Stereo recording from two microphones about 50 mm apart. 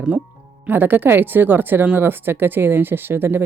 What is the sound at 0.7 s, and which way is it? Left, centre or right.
Speech, right.